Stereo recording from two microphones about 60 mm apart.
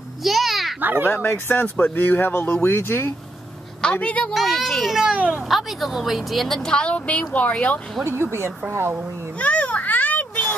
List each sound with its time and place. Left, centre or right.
0.2 s a sound: centre
0.7 s speech: right
1.1 s speech: left
3.8 s a woman's voice: left
4.3 s a child's voice: centre
5.1 s speech: centre
5.5 s a woman's voice: centre; by 7.8 s left
8.2 s speech: right
9.4 s a sound: left